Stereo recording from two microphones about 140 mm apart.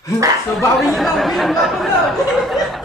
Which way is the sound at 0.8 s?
Centre (ahead or behind).